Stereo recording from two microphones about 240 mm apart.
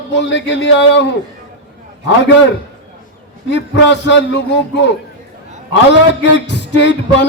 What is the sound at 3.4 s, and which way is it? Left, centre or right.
Music, left.